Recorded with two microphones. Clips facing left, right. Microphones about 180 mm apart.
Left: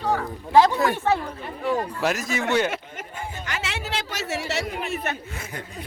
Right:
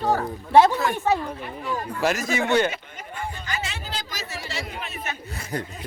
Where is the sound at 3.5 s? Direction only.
80° left.